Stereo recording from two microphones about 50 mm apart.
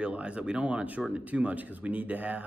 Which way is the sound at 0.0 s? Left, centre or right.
Right.